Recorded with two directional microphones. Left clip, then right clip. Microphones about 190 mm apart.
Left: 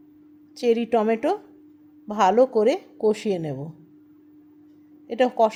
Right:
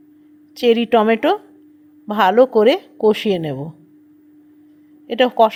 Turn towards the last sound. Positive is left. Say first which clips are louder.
# right 6 dB
turn(degrees=-20)  # may be behind; listen again after turning